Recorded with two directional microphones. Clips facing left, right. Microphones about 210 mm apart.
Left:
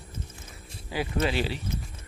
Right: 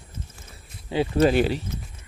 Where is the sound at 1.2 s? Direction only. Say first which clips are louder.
Right 10 dB; 45° right (ahead or behind).